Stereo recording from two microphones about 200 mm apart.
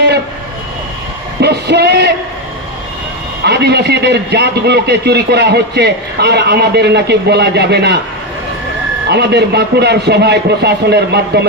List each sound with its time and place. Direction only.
1.4 s a sound: 55° right (ahead or behind)
3.4 s a man's voice: 55° right (ahead or behind)
9.0 s a man's voice: 55° right (ahead or behind)